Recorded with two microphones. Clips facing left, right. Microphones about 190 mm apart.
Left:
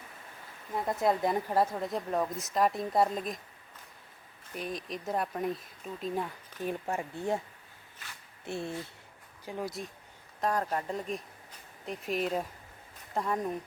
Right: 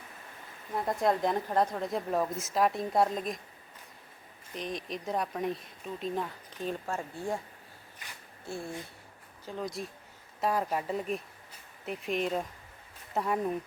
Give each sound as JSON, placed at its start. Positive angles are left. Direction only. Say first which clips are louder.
{"t": 0.7, "sound": "speech", "louder": "even", "side_deg": 0}
{"t": 4.5, "sound": "speech", "louder": "even", "side_deg": 5}
{"t": 8.4, "sound": "speech", "louder": "left 2 dB", "side_deg": 25}
{"t": 9.5, "sound": "speech", "louder": "even", "side_deg": 10}
{"t": 10.4, "sound": "speech", "louder": "right 1 dB", "side_deg": -5}
{"t": 13.1, "sound": "speech", "louder": "right 1 dB", "side_deg": -5}